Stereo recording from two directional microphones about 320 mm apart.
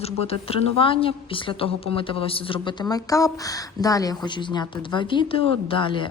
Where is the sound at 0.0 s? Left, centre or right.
Centre.